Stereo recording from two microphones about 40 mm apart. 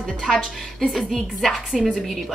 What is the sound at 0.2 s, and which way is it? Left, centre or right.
Speech, centre.